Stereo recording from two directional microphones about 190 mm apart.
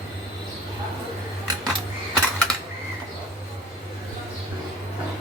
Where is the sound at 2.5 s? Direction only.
20° right (ahead or behind).